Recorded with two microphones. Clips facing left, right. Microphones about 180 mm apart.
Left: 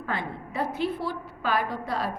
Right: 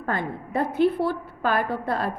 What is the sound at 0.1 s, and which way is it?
A woman's voice, 50° right (ahead or behind).